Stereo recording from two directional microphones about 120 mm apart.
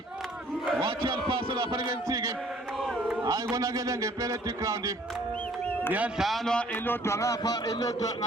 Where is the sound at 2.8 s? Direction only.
5° right (ahead or behind).